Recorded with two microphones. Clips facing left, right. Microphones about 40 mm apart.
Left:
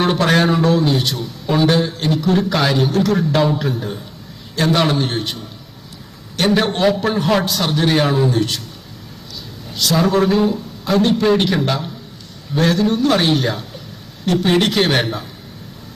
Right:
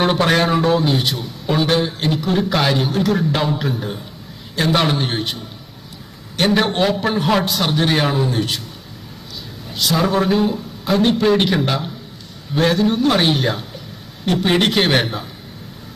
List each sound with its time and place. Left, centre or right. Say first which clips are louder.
0.0 s a sound: even; centre
0.5 s a man's voice: left 1 dB; centre
6.4 s a man's voice: left 1 dB; centre
9.9 s a man's voice: left 2 dB; centre